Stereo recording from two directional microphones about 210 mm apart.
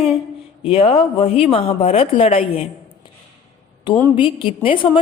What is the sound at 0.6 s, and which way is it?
A woman's voice, 25° left (ahead or behind).